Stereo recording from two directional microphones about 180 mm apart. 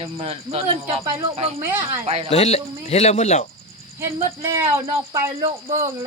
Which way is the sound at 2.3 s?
35° left (ahead or behind).